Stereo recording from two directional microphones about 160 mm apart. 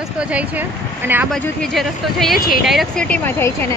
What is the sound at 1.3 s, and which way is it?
Speech, 5° left (ahead or behind).